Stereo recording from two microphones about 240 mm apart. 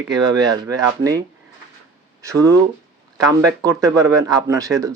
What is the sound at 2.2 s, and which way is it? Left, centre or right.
Speech, centre.